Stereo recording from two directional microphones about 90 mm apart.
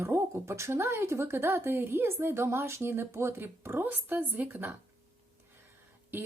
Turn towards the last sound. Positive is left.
turn(degrees=-20)  # may be behind; listen again after turning